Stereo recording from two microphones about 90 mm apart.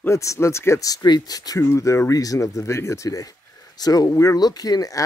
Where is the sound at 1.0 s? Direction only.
50° left (ahead or behind).